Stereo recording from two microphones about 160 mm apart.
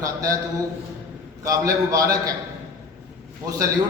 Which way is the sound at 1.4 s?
20° right (ahead or behind).